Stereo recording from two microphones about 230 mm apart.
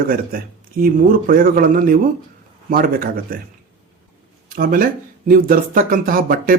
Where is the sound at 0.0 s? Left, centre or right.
Right.